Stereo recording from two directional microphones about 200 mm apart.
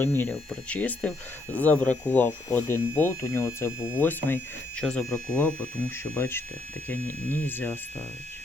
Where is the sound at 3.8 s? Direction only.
5° right (ahead or behind).